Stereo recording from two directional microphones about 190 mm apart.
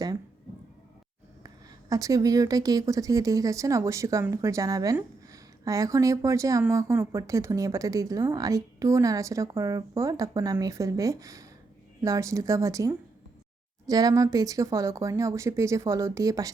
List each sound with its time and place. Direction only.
1.5 s a woman's voice: 15° right (ahead or behind)